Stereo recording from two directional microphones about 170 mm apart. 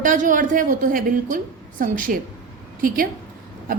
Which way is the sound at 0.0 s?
50° right (ahead or behind).